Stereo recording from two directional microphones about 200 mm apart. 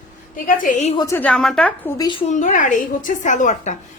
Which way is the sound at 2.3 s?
40° left (ahead or behind).